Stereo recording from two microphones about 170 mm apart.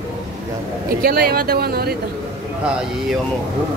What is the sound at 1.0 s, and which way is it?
Speech, 60° right (ahead or behind).